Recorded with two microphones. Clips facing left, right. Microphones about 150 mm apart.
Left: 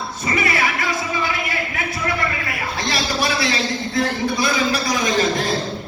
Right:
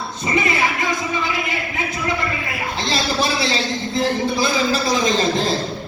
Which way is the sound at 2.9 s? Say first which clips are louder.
Right 2 dB; 25° right (ahead or behind).